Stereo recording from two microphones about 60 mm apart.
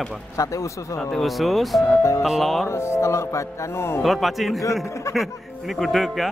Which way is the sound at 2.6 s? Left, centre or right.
Left.